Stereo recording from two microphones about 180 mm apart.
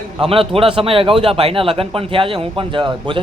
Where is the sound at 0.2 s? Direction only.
30° right (ahead or behind).